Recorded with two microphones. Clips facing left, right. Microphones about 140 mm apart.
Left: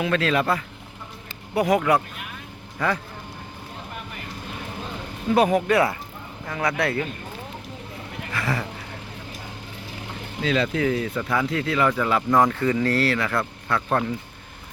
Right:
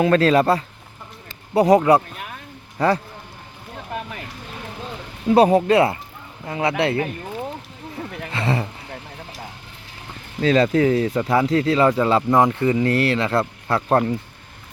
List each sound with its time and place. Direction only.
0.0 s speech: 40° right (ahead or behind)
5.3 s a man's voice: 35° right (ahead or behind)
8.3 s a sound: 25° right (ahead or behind)
10.4 s speech: 40° right (ahead or behind)